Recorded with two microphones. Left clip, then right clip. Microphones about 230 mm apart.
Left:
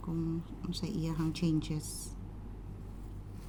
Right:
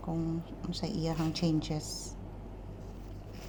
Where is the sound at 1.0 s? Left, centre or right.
Left.